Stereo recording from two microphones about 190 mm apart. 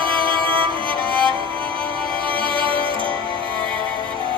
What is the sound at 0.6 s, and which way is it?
Music, 25° right (ahead or behind).